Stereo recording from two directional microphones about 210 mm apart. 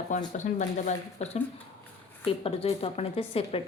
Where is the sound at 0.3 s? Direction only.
35° left (ahead or behind).